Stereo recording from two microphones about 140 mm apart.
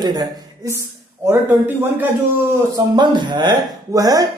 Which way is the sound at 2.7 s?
30° right (ahead or behind).